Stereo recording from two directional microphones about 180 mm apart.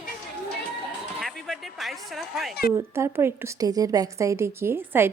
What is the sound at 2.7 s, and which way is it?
A woman's voice, 15° right (ahead or behind).